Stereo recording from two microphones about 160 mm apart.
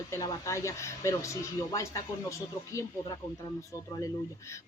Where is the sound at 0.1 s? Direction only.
20° left (ahead or behind).